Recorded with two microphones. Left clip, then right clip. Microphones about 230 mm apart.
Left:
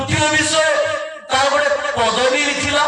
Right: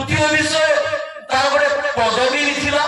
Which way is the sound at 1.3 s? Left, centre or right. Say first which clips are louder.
Even; left.